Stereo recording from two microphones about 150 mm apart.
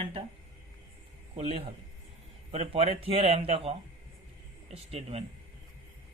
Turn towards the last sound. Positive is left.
turn(degrees=-40)  # may be behind; listen again after turning